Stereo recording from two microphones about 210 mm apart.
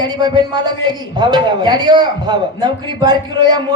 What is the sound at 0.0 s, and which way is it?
A man's voice, 20° right (ahead or behind).